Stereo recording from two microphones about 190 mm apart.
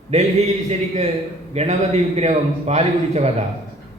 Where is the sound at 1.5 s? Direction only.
35° right (ahead or behind).